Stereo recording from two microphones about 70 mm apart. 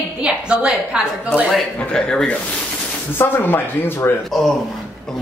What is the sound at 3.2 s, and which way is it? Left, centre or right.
Speech, left.